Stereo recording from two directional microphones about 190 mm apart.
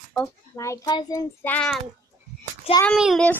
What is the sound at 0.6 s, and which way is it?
Speech, 20° left (ahead or behind).